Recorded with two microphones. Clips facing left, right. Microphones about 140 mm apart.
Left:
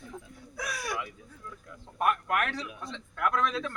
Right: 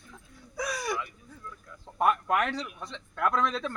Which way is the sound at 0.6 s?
5° left (ahead or behind).